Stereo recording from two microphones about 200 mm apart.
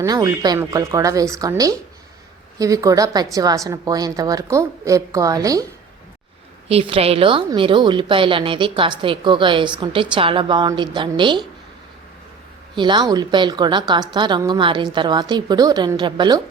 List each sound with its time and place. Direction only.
0.0 s speech: 15° right (ahead or behind)
6.7 s a woman's voice: 30° right (ahead or behind)
12.7 s a woman's voice: 25° right (ahead or behind)